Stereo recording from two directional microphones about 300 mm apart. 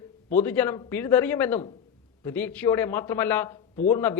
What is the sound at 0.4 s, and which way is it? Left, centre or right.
A man's voice, centre.